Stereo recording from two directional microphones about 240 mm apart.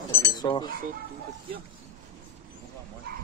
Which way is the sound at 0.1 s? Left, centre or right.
Centre.